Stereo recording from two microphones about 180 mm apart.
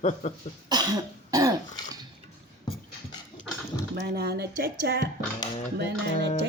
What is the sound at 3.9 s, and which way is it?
Speech, 65° right (ahead or behind).